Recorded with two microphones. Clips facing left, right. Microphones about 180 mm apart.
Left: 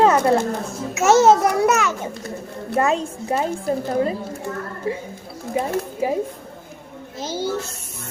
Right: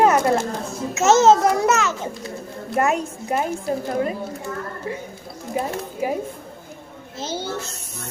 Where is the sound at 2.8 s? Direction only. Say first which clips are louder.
Left 1 dB; 30° left (ahead or behind).